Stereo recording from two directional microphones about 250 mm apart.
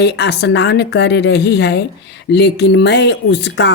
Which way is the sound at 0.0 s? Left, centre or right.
Left.